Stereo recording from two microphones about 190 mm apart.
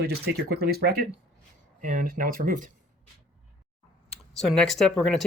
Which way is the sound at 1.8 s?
45° right (ahead or behind).